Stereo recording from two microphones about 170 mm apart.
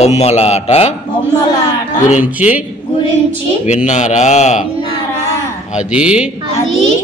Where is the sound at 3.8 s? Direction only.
45° left (ahead or behind).